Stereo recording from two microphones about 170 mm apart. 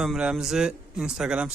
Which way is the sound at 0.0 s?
5° right (ahead or behind).